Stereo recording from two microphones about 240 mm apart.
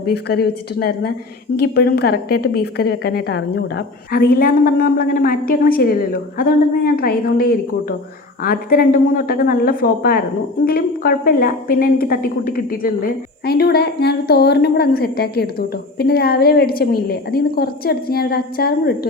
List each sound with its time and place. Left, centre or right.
0.0 s a woman's voice: left